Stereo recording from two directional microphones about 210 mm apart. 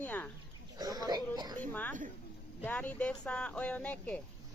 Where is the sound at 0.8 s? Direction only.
20° right (ahead or behind).